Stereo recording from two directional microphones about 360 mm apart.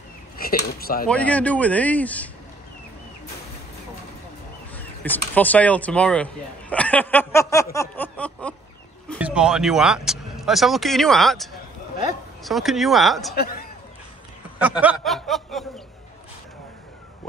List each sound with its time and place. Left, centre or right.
0.4 s speech: left
1.0 s speech: centre
4.7 s speech: centre
7.7 s a sound: centre
9.2 s speech: centre
12.4 s speech: centre
13.3 s speech: left
14.6 s speech: centre